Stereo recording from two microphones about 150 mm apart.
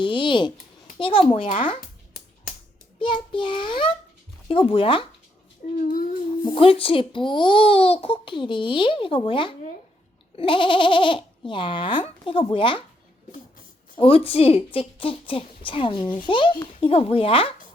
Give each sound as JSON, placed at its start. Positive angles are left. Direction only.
{"t": 0.0, "sound": "a child's voice", "side_deg": 30}
{"t": 3.0, "sound": "a child's voice", "side_deg": 35}
{"t": 5.6, "sound": "a child's voice", "side_deg": 60}
{"t": 6.6, "sound": "a child's voice", "side_deg": 35}
{"t": 13.3, "sound": "a sound", "side_deg": 65}
{"t": 14.3, "sound": "a child's voice", "side_deg": 40}